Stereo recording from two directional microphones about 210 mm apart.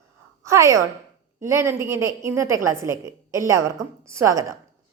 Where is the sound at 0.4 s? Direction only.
15° right (ahead or behind).